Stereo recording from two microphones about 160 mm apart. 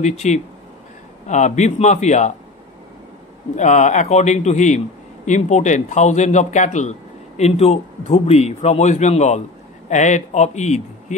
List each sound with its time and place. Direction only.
0.0 s a man's voice: 45° left (ahead or behind)
3.5 s a man's voice: 45° left (ahead or behind)